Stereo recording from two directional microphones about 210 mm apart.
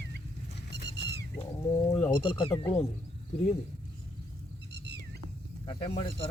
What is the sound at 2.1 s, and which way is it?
Speech, 25° left (ahead or behind).